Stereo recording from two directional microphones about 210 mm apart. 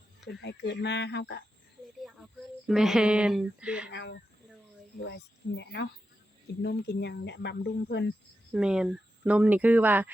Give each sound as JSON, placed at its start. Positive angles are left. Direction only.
{"t": 0.3, "sound": "speech", "side_deg": 55}
{"t": 2.6, "sound": "a woman's voice", "side_deg": 0}
{"t": 3.9, "sound": "speech", "side_deg": 55}
{"t": 8.5, "sound": "speech", "side_deg": -5}